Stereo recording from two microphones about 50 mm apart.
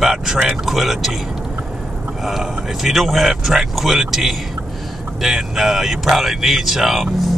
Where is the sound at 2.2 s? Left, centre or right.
Centre.